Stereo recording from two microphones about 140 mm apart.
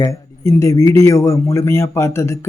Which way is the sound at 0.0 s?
20° left (ahead or behind).